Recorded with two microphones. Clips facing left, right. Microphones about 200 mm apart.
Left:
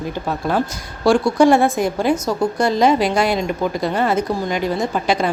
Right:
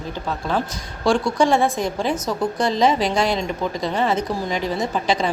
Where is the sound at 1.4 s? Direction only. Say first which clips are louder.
Left 5 dB; 5° left (ahead or behind).